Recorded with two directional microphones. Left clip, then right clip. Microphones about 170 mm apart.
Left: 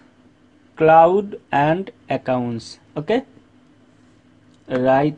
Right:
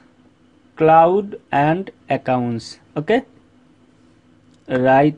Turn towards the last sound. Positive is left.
turn(degrees=-15)  # may be behind; listen again after turning